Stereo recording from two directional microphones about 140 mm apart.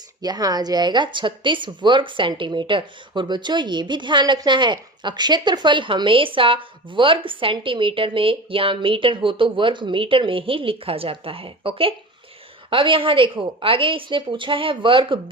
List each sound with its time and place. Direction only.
0.2 s speech: 25° right (ahead or behind)